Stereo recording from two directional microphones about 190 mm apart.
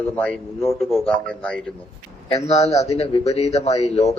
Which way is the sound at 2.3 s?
35° left (ahead or behind).